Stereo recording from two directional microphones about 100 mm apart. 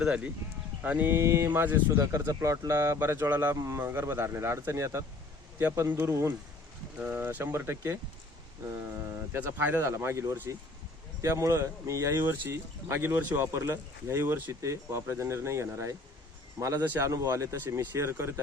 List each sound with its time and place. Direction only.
0.0 s speech: 10° right (ahead or behind); by 3.0 s 35° right (ahead or behind)
3.0 s speech: 20° right (ahead or behind)
3.5 s speech: 30° right (ahead or behind)
7.0 s speech: 20° right (ahead or behind)
9.3 s speech: 20° right (ahead or behind)